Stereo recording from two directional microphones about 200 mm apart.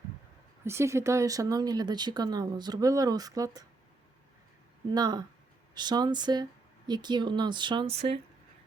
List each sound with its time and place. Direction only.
0.6 s speech: 15° right (ahead or behind)
4.9 s speech: 20° right (ahead or behind)